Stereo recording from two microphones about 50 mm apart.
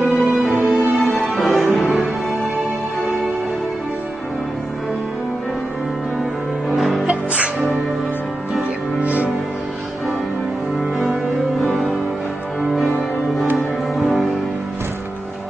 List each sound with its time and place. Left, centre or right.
0.0 s music: centre
6.7 s music: centre
9.0 s music: right
10.8 s cello: centre
11.6 s music: centre
13.6 s music: centre